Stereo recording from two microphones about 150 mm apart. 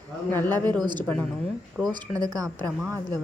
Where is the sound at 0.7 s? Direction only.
30° right (ahead or behind).